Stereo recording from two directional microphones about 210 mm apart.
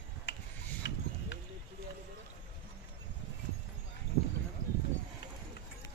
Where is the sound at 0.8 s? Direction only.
55° left (ahead or behind).